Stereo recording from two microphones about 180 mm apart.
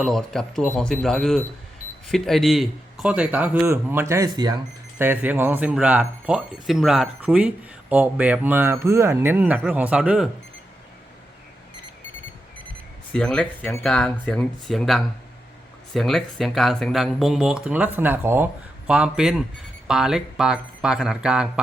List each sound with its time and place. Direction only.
0.0 s speech: centre (ahead or behind)
13.1 s speech: 5° left (ahead or behind)